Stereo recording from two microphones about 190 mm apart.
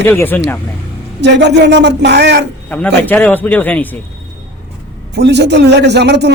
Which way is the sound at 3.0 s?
10° left (ahead or behind).